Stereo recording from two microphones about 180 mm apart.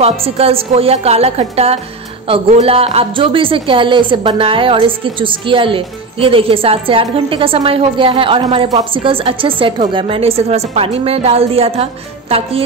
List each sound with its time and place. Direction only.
0.0 s a woman's voice: 30° right (ahead or behind)